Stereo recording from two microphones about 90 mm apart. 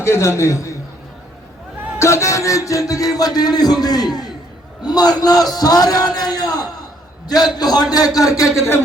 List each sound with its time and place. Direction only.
0.0 s a man's voice: 30° left (ahead or behind)
2.0 s music: 30° left (ahead or behind)
4.8 s a man's voice: 50° left (ahead or behind)